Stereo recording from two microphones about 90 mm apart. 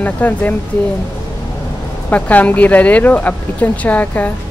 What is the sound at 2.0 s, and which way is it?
Speech, 15° left (ahead or behind).